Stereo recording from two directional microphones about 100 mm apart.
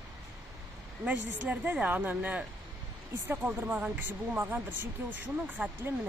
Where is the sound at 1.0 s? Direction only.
15° right (ahead or behind).